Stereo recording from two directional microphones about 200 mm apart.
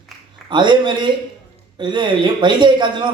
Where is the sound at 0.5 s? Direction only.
25° right (ahead or behind).